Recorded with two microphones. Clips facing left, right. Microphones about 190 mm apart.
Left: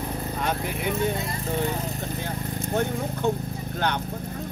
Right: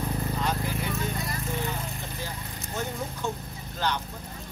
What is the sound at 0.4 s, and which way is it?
Vehicle, 60° left (ahead or behind).